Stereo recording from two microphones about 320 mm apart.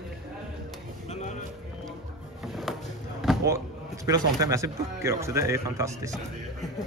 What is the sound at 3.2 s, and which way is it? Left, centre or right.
Basketball bounce, centre.